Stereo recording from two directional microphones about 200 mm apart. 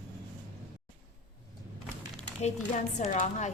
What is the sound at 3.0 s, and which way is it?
Speech, 35° left (ahead or behind).